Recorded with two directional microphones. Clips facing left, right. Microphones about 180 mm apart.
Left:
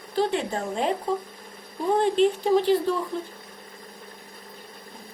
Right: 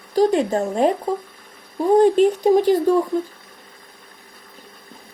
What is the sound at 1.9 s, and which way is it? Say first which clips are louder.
Speech: right 7 dB; 45° right (ahead or behind).